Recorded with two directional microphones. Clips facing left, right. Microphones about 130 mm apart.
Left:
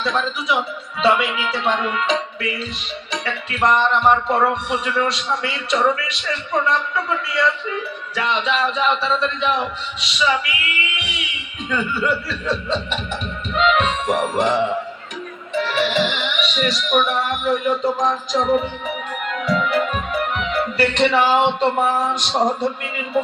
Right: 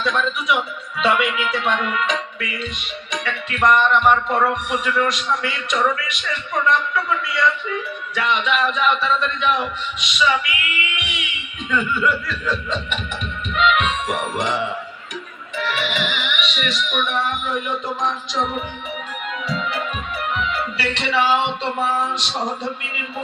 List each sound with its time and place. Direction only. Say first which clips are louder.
0.0 s music: even; 30° left (ahead or behind)
15.5 s speech: left 5 dB; 35° left (ahead or behind)
19.5 s music: left 7 dB; 55° left (ahead or behind)
20.7 s a sound: left 6 dB; 50° left (ahead or behind)